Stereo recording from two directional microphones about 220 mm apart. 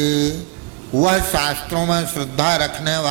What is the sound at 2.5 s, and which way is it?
Mantra, 15° right (ahead or behind).